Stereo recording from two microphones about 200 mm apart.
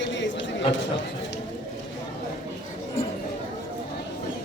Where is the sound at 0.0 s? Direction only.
65° left (ahead or behind).